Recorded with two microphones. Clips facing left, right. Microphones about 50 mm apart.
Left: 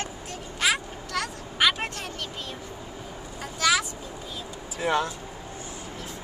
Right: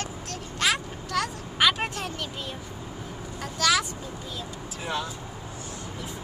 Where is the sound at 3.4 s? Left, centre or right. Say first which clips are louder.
Even; centre.